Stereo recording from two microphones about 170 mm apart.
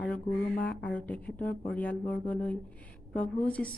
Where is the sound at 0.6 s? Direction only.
10° left (ahead or behind).